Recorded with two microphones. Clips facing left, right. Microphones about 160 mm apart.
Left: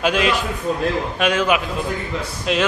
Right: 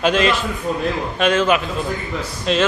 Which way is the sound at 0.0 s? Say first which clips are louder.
Right 2 dB; 10° left (ahead or behind).